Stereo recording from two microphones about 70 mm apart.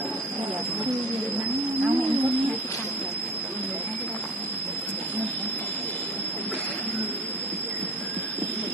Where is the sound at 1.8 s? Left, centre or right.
Right.